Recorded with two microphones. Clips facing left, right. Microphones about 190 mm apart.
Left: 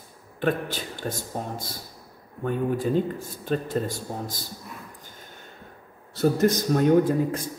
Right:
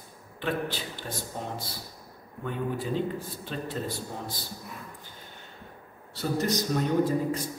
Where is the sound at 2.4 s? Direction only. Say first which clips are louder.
Left 6 dB; 45° left (ahead or behind).